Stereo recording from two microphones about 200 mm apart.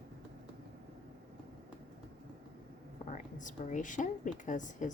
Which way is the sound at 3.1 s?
40° left (ahead or behind).